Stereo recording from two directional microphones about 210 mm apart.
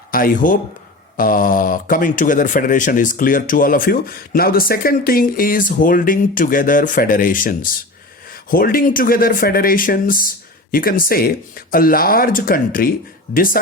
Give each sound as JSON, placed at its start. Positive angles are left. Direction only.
{"t": 0.1, "sound": "speech", "side_deg": 40}